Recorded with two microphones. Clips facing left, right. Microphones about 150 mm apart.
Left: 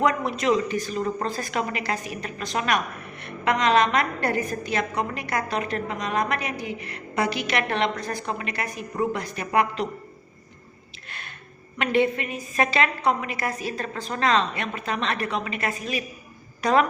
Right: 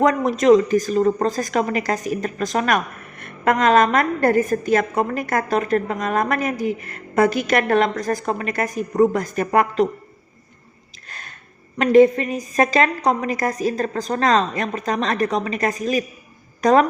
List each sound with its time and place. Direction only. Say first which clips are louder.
0.0 s a woman's voice: right 6 dB; 40° right (ahead or behind)
11.1 s a sound: right 1 dB; 40° right (ahead or behind)
11.8 s a woman's voice: right 9 dB; 40° right (ahead or behind)